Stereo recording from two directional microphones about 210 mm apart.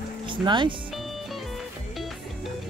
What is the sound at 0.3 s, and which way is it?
Speech, 25° right (ahead or behind).